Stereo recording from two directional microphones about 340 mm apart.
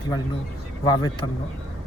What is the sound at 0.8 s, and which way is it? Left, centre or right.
Speech, centre.